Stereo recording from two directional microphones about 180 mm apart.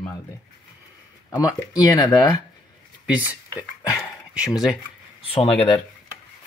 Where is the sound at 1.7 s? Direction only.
20° left (ahead or behind).